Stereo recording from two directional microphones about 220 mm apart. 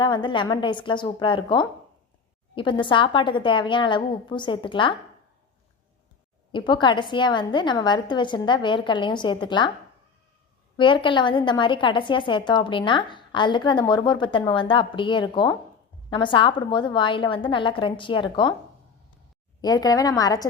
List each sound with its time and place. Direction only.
0.0 s a woman's voice: 20° left (ahead or behind)
6.5 s a woman's voice: 20° left (ahead or behind)
10.8 s a woman's voice: 20° left (ahead or behind)
19.6 s a woman's voice: 15° left (ahead or behind)